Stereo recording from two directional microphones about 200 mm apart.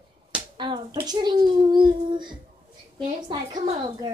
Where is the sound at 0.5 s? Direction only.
25° right (ahead or behind).